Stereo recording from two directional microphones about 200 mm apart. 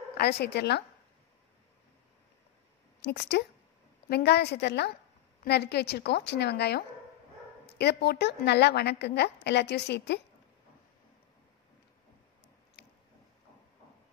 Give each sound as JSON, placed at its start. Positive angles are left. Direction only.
{"t": 0.2, "sound": "a woman's voice", "side_deg": 55}
{"t": 3.0, "sound": "a woman's voice", "side_deg": 60}